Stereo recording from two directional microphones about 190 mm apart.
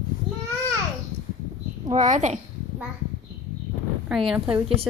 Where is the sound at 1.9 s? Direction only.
40° right (ahead or behind).